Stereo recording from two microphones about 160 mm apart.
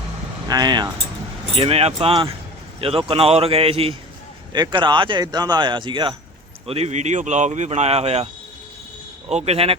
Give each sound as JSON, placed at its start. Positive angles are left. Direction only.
{"t": 0.4, "sound": "speech", "side_deg": -25}
{"t": 1.5, "sound": "speech", "side_deg": -40}
{"t": 4.5, "sound": "speech", "side_deg": -30}
{"t": 6.7, "sound": "speech", "side_deg": -40}
{"t": 9.3, "sound": "speech", "side_deg": -40}